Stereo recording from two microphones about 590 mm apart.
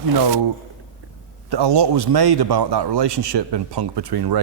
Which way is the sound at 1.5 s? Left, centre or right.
Right.